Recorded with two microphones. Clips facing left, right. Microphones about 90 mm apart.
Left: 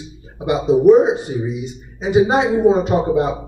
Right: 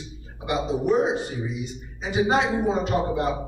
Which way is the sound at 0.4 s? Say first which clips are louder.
Left 10 dB; 20° left (ahead or behind).